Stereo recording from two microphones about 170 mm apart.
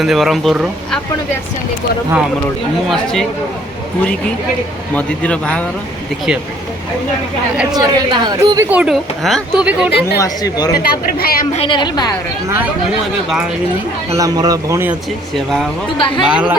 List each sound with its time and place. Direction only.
0.0 s speech: centre (ahead or behind)
2.9 s speech: 5° left (ahead or behind)
4.9 s speech: 10° left (ahead or behind)
7.7 s a woman's voice: 25° right (ahead or behind)
8.6 s a woman's voice: 10° right (ahead or behind)
10.2 s speech: 20° left (ahead or behind)
10.8 s speech: 60° left (ahead or behind)
11.5 s speech: 30° left (ahead or behind)
14.1 s a woman's voice: 20° right (ahead or behind)
16.0 s speech: 30° left (ahead or behind)
16.3 s a woman's voice: 5° right (ahead or behind)